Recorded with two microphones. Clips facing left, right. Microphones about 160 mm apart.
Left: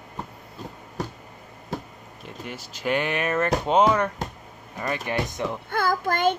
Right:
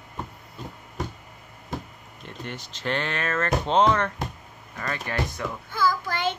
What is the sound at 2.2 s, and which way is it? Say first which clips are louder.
Speech: even; 5° left (ahead or behind).